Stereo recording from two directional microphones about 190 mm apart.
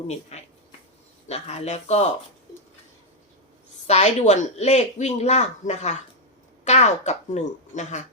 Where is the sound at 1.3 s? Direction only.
35° left (ahead or behind).